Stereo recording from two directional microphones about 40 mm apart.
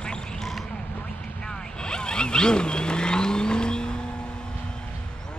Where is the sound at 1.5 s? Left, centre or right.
Left.